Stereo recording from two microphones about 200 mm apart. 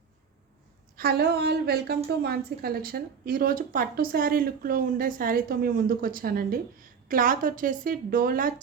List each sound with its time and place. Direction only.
0.9 s a woman's voice: 55° right (ahead or behind)